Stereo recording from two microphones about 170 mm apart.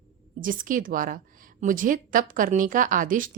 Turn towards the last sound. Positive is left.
turn(degrees=-50)  # may be behind; listen again after turning